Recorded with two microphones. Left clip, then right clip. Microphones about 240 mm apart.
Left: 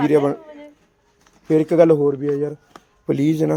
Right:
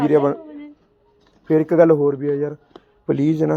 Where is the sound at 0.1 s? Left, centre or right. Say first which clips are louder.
Right 1 dB; centre.